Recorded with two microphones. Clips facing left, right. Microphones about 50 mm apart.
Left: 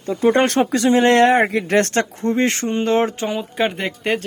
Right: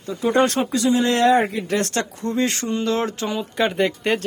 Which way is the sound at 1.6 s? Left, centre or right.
Left.